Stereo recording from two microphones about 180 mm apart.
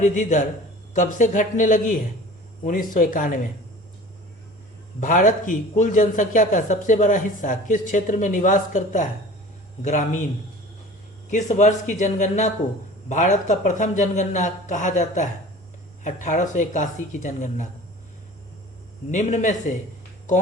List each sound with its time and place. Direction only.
0.0 s a man's voice: 45° left (ahead or behind)
4.9 s a man's voice: 45° left (ahead or behind)
11.3 s a man's voice: 40° left (ahead or behind)
19.1 s a man's voice: 40° left (ahead or behind)